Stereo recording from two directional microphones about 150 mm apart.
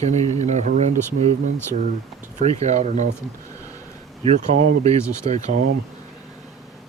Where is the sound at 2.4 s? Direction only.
50° right (ahead or behind).